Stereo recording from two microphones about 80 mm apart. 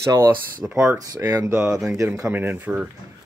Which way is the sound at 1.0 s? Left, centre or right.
Right.